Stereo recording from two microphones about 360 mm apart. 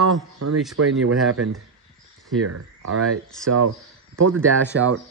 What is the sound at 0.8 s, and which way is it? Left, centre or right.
Speech, right.